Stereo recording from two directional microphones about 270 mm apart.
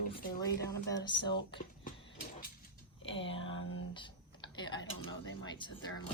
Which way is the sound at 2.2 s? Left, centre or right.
Left.